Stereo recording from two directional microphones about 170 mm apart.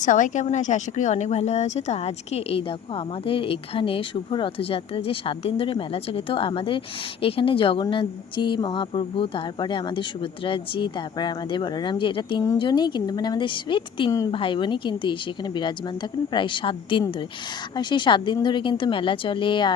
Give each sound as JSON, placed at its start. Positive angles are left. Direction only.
{"t": 0.0, "sound": "a woman's voice", "side_deg": 45}